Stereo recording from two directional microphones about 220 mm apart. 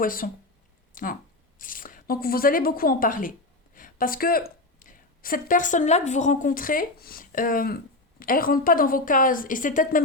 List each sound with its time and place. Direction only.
0.0 s a woman's voice: 40° left (ahead or behind)